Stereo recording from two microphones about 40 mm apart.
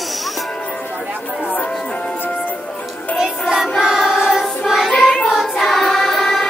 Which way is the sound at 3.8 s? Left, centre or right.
Centre.